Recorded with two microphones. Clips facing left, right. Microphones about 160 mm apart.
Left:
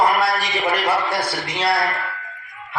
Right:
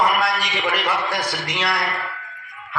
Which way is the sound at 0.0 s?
30° left (ahead or behind).